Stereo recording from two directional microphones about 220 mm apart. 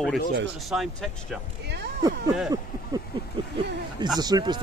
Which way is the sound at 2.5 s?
20° right (ahead or behind).